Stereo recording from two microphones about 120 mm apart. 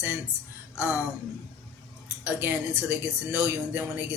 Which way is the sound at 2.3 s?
20° right (ahead or behind).